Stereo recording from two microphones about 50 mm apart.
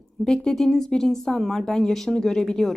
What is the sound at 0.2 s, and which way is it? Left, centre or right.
Speech, centre.